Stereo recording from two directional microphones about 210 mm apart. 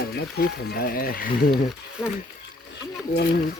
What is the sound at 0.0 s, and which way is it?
Speech, 45° left (ahead or behind).